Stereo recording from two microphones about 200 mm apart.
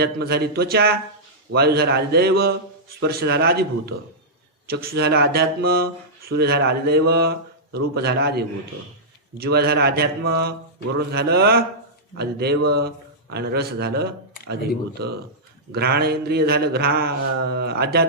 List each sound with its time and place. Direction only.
0.0 s speech: 55° right (ahead or behind)
15.7 s speech: 55° right (ahead or behind)